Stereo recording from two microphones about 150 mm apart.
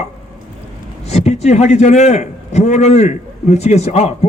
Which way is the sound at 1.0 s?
45° left (ahead or behind).